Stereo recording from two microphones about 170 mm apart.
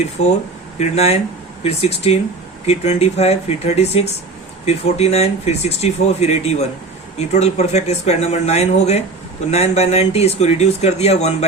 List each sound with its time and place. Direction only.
0.0 s speech: 40° left (ahead or behind)